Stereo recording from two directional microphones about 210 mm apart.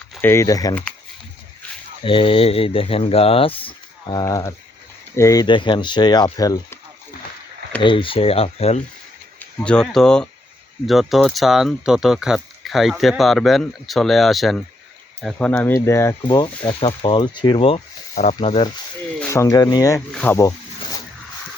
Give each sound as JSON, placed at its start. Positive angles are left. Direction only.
{"t": 0.2, "sound": "speech", "side_deg": 10}
{"t": 2.0, "sound": "speech", "side_deg": 25}
{"t": 7.8, "sound": "speech", "side_deg": 25}
{"t": 9.4, "sound": "speech", "side_deg": 5}
{"t": 19.2, "sound": "speech", "side_deg": 15}